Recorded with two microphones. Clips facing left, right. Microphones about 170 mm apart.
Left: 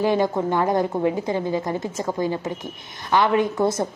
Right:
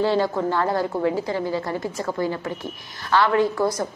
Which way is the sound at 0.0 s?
15° left (ahead or behind).